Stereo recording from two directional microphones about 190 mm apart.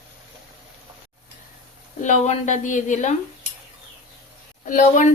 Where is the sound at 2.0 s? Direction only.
40° left (ahead or behind).